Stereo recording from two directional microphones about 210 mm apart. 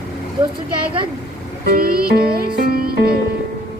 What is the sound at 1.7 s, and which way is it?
Music, 45° right (ahead or behind).